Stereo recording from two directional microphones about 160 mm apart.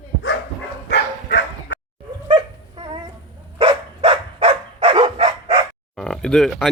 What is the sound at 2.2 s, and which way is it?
Dog, 30° right (ahead or behind).